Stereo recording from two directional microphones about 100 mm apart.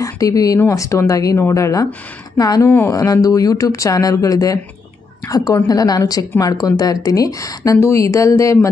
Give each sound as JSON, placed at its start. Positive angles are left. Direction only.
{"t": 0.0, "sound": "a woman's voice", "side_deg": 35}